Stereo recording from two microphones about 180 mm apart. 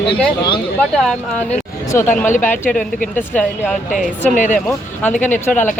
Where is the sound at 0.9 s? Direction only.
5° left (ahead or behind).